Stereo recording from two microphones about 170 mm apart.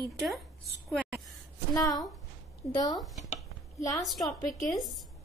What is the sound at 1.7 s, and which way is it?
Speech, 20° left (ahead or behind).